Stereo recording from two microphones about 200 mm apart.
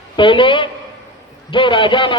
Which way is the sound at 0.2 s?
25° left (ahead or behind).